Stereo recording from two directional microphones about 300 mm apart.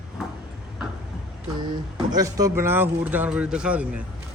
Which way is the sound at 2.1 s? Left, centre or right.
Centre.